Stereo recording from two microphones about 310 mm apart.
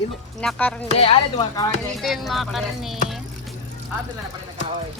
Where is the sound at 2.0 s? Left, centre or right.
Centre.